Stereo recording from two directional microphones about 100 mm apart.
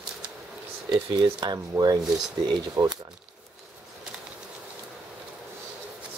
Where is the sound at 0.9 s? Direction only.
50° right (ahead or behind).